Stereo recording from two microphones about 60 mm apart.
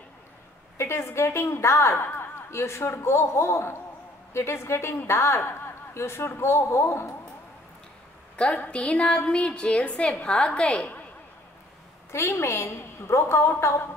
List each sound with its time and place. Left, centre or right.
0.7 s a woman's voice: left
2.0 s a man's voice: left
8.4 s a woman's voice: centre
12.1 s a woman's voice: left